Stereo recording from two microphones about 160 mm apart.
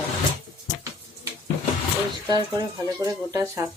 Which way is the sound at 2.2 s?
25° right (ahead or behind).